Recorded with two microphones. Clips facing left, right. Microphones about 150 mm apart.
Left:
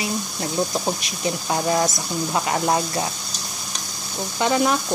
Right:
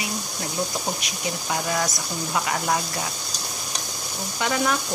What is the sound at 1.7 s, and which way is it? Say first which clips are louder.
Speech: left 5 dB; 30° left (ahead or behind).